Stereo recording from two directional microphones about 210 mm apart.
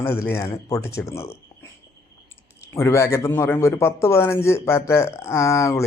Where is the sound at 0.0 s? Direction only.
10° left (ahead or behind).